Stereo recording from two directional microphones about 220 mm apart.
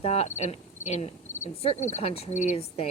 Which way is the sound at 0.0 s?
30° left (ahead or behind).